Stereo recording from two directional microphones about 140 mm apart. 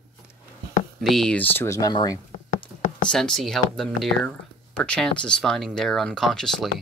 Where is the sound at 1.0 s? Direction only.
Centre (ahead or behind); by 2.6 s 30° left (ahead or behind).